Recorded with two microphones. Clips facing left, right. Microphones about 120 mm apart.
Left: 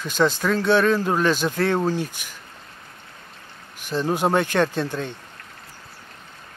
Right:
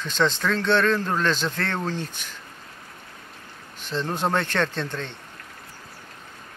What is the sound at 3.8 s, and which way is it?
Speech, 10° left (ahead or behind).